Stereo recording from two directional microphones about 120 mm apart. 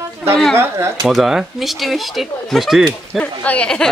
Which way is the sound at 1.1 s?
5° right (ahead or behind).